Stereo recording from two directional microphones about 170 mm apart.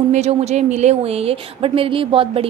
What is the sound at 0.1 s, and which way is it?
A woman's voice, 40° right (ahead or behind).